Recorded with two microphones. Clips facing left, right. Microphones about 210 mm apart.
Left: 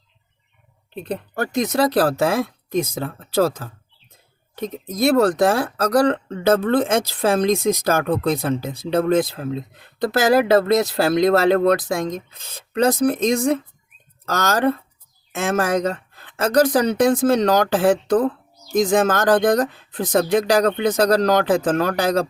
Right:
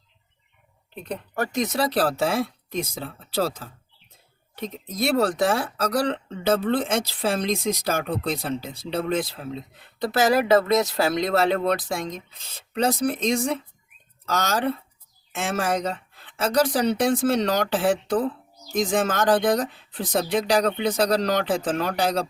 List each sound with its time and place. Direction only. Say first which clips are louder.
0.9 s speech: left 5 dB; 30° left (ahead or behind); by 14.8 s 45° left (ahead or behind)
15.8 s speech: left 5 dB; 45° left (ahead or behind)